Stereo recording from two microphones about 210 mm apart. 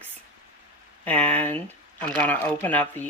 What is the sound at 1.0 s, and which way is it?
Speech, 5° left (ahead or behind).